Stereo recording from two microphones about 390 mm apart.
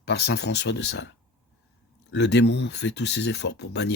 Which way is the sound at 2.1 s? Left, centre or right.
Left.